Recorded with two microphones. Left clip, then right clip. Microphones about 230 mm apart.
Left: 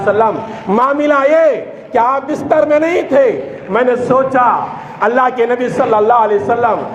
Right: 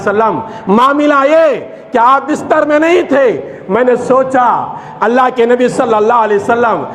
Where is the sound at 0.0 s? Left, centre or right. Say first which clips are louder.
Right 1 dB; right.